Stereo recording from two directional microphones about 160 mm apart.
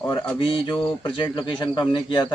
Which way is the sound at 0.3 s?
35° left (ahead or behind).